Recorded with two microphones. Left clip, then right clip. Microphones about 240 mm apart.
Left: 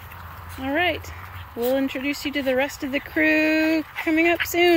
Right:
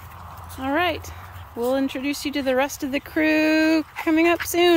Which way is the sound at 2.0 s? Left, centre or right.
Right.